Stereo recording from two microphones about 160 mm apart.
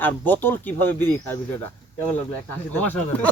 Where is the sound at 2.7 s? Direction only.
10° left (ahead or behind).